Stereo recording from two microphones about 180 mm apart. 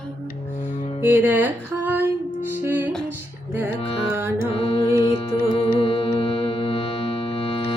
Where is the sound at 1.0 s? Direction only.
10° right (ahead or behind).